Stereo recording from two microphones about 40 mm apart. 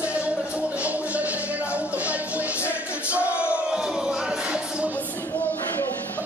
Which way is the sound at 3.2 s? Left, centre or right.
Left.